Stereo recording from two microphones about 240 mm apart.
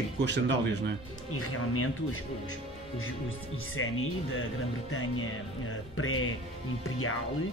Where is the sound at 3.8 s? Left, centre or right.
Left.